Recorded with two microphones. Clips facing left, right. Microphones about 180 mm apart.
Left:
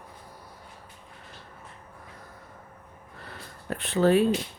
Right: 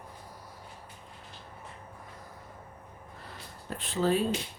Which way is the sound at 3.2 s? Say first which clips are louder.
Left 6 dB; 65° left (ahead or behind).